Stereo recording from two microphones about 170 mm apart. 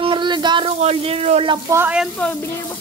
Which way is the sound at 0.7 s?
40° right (ahead or behind).